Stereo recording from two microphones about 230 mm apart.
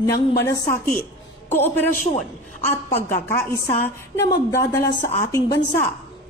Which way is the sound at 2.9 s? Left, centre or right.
Left.